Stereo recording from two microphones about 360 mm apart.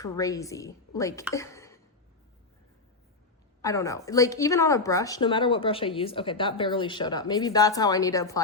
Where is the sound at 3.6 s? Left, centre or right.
Centre.